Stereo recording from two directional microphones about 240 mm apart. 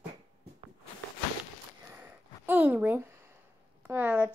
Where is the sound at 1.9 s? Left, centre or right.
Centre.